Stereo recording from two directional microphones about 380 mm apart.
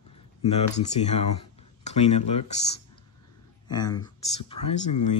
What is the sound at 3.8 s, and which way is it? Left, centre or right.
Speech, centre.